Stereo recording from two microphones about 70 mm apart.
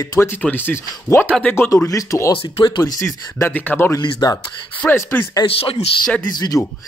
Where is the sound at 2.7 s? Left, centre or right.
Left.